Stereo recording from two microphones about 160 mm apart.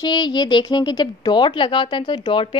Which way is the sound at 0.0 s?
25° left (ahead or behind).